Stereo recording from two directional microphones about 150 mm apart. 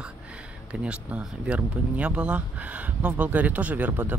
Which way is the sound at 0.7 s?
5° right (ahead or behind).